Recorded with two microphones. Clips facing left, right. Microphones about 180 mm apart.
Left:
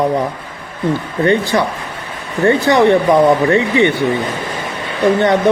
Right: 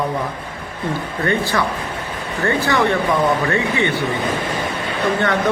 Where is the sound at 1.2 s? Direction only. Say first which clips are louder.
Left 6 dB; 20° left (ahead or behind).